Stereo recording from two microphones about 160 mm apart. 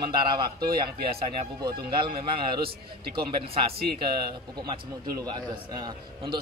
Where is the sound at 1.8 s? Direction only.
35° right (ahead or behind).